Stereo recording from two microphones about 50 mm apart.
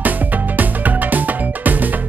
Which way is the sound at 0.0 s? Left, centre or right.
Right.